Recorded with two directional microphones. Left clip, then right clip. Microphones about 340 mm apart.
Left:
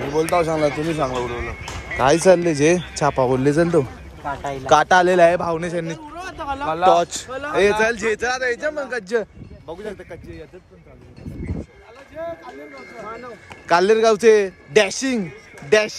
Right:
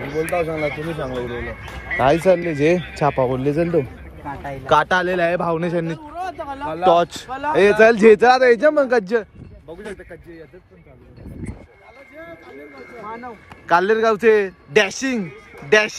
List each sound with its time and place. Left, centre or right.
0.0 s speech: left
1.3 s speech: right
2.0 s a man's voice: centre
13.7 s a man's voice: centre